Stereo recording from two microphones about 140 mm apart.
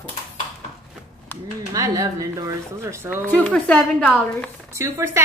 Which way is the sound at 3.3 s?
10° left (ahead or behind).